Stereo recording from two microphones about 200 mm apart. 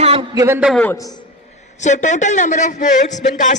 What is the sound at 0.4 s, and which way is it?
Speech, 10° right (ahead or behind).